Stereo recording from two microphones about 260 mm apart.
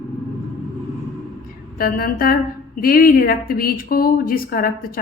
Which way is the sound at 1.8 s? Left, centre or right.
Left.